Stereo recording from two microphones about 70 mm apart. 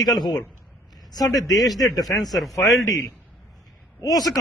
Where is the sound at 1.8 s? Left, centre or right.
Left.